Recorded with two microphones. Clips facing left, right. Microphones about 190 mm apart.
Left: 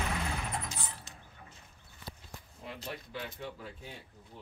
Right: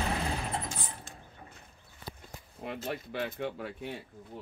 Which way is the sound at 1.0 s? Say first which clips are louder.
Right 4 dB; 50° right (ahead or behind).